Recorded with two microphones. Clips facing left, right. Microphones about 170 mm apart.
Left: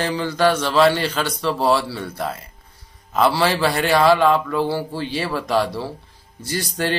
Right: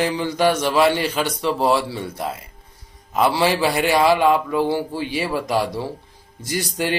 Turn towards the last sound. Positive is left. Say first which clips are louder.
# even
turn(degrees=-15)  # may be behind; listen again after turning